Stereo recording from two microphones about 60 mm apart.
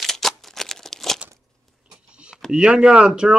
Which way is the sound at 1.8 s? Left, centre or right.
Centre.